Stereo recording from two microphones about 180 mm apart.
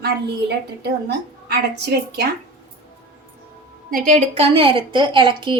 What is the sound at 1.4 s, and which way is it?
Speech, 65° right (ahead or behind).